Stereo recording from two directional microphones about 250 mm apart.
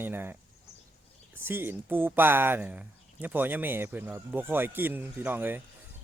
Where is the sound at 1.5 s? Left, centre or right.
Centre.